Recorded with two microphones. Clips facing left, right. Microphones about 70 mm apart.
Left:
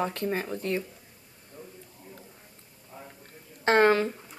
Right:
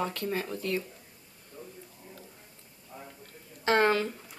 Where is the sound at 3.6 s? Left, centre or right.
Left.